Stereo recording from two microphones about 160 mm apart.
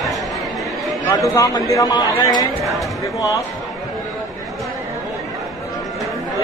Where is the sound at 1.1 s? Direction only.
20° left (ahead or behind).